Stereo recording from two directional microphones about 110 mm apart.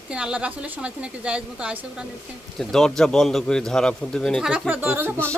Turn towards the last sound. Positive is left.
turn(degrees=-20)  # may be behind; listen again after turning